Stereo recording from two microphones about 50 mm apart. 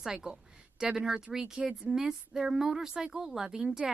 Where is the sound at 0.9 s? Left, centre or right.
Centre.